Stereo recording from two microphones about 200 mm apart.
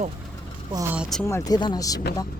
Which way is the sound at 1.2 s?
15° left (ahead or behind).